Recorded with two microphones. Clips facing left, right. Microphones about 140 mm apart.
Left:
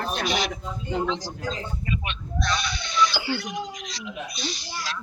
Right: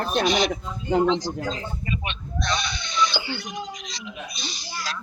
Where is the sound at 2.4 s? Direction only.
5° left (ahead or behind).